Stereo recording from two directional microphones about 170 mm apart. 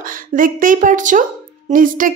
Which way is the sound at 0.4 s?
50° right (ahead or behind).